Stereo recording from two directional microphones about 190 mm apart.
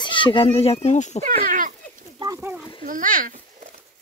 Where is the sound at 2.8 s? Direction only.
45° right (ahead or behind).